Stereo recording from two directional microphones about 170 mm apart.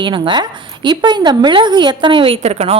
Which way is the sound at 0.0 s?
25° right (ahead or behind).